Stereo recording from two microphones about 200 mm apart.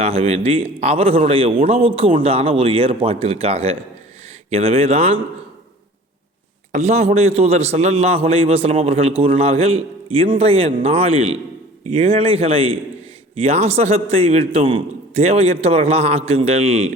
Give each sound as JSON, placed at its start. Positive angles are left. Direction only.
{"t": 0.0, "sound": "a man's voice", "side_deg": -30}
{"t": 6.7, "sound": "a man's voice", "side_deg": -35}